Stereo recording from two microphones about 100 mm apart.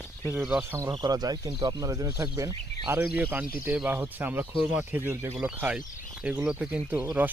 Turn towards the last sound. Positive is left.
turn(degrees=-15)  # may be behind; listen again after turning